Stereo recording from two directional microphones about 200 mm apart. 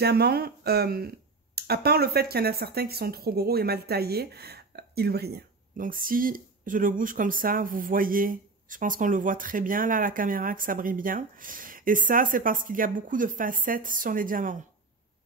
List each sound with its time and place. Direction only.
0.0 s speech: 50° right (ahead or behind)